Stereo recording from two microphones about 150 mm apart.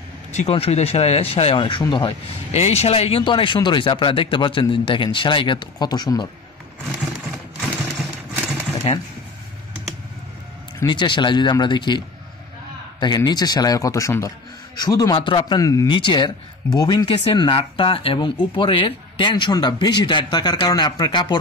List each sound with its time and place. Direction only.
0.3 s speech: 45° left (ahead or behind); by 2.1 s 30° left (ahead or behind)
2.5 s speech: 45° left (ahead or behind); by 6.2 s 25° left (ahead or behind)
6.9 s sewing machine: 5° right (ahead or behind)
10.9 s speech: 30° left (ahead or behind)
13.0 s speech: 25° left (ahead or behind)
17.3 s speech: 40° left (ahead or behind)